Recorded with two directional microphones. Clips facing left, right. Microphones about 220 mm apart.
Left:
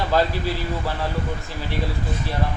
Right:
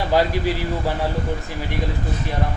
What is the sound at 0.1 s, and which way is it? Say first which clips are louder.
Speech: right 3 dB; 15° right (ahead or behind).